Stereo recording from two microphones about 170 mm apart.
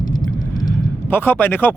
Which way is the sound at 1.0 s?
10° left (ahead or behind).